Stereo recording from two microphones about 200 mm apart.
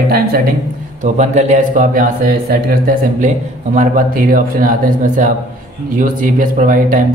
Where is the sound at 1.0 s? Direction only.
35° right (ahead or behind).